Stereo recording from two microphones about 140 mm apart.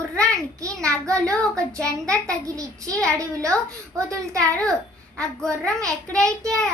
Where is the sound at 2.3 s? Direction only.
25° right (ahead or behind).